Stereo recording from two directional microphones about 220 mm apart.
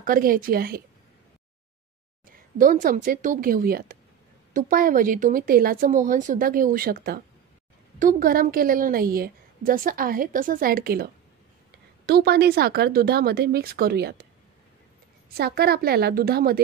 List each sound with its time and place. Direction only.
0.0 s a woman's voice: 40° right (ahead or behind)
2.3 s a woman's voice: 40° right (ahead or behind)
12.1 s speech: 45° right (ahead or behind)
15.2 s speech: 45° right (ahead or behind)